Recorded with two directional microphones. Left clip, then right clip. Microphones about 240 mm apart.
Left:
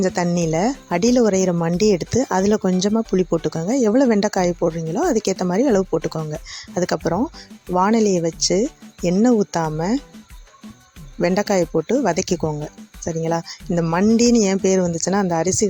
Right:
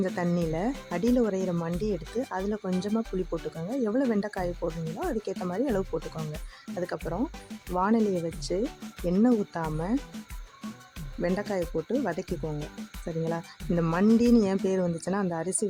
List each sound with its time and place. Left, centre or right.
0.0 s speech: left
11.2 s speech: left
13.7 s speech: centre